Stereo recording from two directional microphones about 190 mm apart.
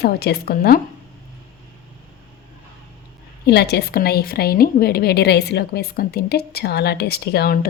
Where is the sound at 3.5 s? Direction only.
60° left (ahead or behind).